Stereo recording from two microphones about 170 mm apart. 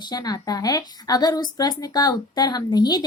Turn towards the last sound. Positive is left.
turn(degrees=25)  # may be behind; listen again after turning